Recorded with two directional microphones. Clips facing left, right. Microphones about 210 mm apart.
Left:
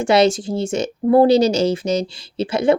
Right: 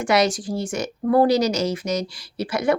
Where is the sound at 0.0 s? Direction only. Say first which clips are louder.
Left 5 dB; 25° left (ahead or behind).